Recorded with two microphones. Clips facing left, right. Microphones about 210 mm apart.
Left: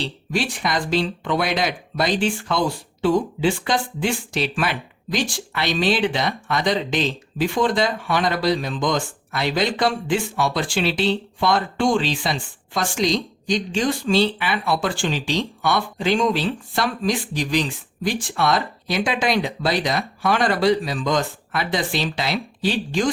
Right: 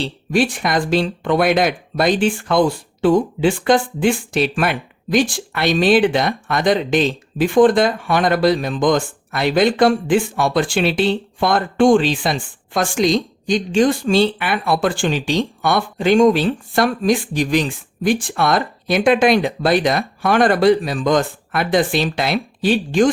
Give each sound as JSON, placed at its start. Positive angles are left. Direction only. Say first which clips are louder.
{"t": 0.0, "sound": "speech", "louder": "right 7 dB", "side_deg": -50}